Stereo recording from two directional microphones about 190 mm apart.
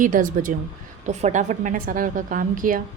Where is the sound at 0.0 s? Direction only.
45° right (ahead or behind).